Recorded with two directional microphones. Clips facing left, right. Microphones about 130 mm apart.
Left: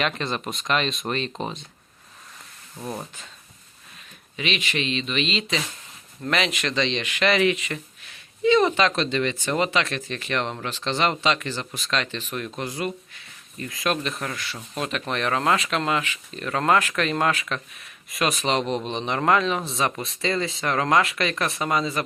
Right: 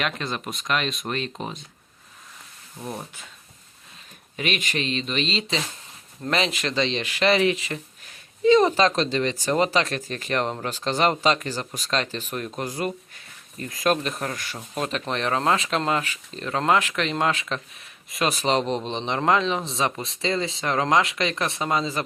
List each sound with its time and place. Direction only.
0.0 s speech: centre (ahead or behind)
2.8 s speech: centre (ahead or behind)
4.4 s speech: 45° right (ahead or behind)
16.5 s speech: 20° right (ahead or behind)